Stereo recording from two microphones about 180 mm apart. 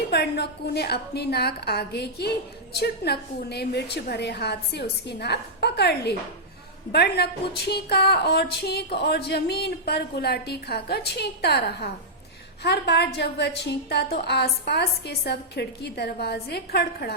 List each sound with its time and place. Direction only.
0.1 s a woman's voice: 65° left (ahead or behind)